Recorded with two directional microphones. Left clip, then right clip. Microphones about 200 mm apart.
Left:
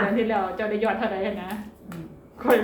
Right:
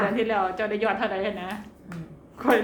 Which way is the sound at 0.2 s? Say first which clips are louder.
Even; 45° right (ahead or behind).